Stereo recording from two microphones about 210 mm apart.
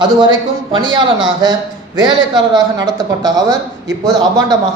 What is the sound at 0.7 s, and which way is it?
A man's voice, 20° right (ahead or behind).